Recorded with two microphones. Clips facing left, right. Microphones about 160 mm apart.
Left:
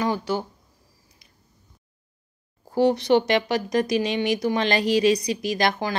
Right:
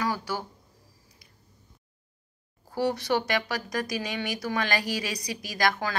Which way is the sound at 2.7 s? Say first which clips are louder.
Left 8 dB; 20° left (ahead or behind).